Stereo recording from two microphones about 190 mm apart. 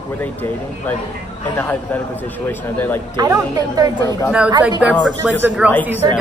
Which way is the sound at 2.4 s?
10° left (ahead or behind).